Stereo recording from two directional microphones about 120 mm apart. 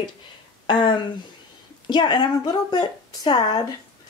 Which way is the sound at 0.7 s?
45° left (ahead or behind).